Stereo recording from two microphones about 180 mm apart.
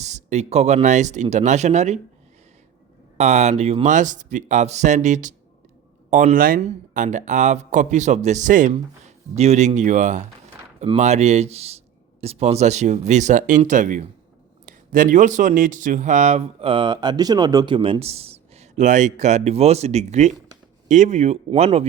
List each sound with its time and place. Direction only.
0.0 s speech: 40° right (ahead or behind)
3.2 s speech: 40° right (ahead or behind)